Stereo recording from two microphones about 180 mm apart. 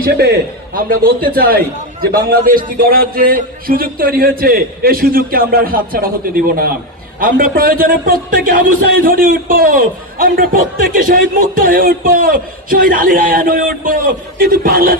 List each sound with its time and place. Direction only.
0.0 s a man's voice: 65° right (ahead or behind)